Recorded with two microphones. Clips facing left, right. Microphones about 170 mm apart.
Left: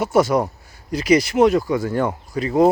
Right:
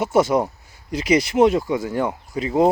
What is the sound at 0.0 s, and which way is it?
Speech, 25° right (ahead or behind).